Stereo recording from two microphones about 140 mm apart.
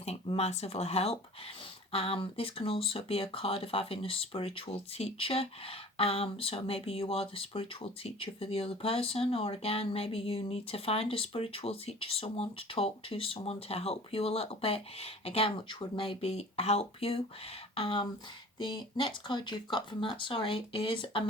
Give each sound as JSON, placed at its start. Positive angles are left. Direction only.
{"t": 0.0, "sound": "speech", "side_deg": 50}